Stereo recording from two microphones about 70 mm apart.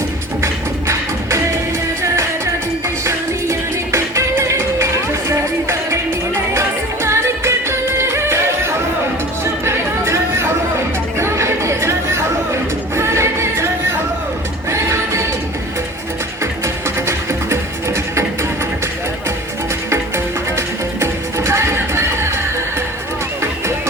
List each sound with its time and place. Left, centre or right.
0.4 s music: right
3.0 s music: right
9.4 s chatter: right
13.0 s music: right
14.7 s music: right
17.1 s music: right
19.9 s music: right